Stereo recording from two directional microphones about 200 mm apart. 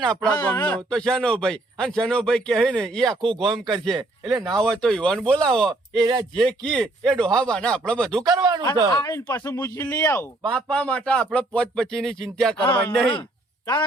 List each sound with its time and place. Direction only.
0.0 s a man's voice: 5° left (ahead or behind)
3.9 s speech: 15° right (ahead or behind)
4.5 s a man's voice: 5° left (ahead or behind)
6.0 s speech: 20° right (ahead or behind)
6.3 s a man's voice: 5° left (ahead or behind)
8.2 s speech: 20° right (ahead or behind)
9.0 s a man's voice: 15° left (ahead or behind)